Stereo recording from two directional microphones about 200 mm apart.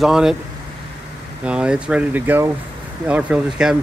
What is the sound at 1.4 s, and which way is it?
Speech, 5° right (ahead or behind).